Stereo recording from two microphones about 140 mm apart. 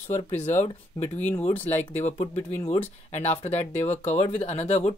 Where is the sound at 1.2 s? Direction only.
10° left (ahead or behind).